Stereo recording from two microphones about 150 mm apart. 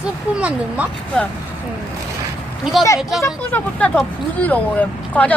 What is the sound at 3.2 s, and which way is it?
Speech, 10° left (ahead or behind).